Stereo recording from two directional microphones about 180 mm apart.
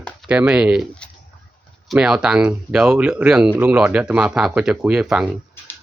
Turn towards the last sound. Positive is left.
turn(degrees=-5)  # may be behind; listen again after turning